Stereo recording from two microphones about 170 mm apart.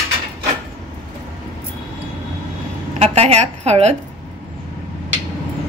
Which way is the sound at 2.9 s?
40° right (ahead or behind).